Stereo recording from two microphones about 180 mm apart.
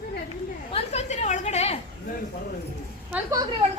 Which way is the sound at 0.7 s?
35° left (ahead or behind).